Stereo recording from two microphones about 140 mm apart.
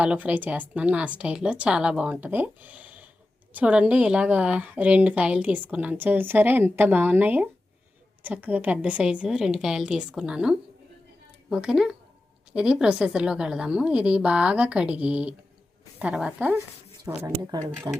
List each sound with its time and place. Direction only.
0.0 s a woman's voice: 10° right (ahead or behind)
17.2 s speech: 20° right (ahead or behind)